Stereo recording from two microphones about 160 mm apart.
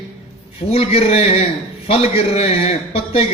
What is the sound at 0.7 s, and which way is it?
A man's voice, 40° left (ahead or behind).